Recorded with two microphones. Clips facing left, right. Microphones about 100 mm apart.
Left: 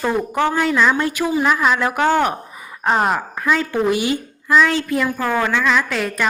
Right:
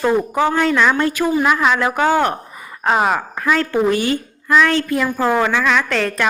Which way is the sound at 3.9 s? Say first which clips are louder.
Right 1 dB; 15° left (ahead or behind).